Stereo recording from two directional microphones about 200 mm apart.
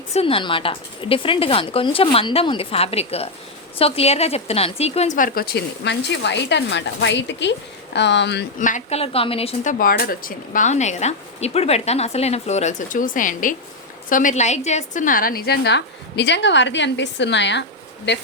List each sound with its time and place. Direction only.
0.1 s a woman's voice: 30° left (ahead or behind); by 8.4 s 60° left (ahead or behind)
8.5 s speech: 40° left (ahead or behind)
9.7 s a woman's voice: 45° left (ahead or behind)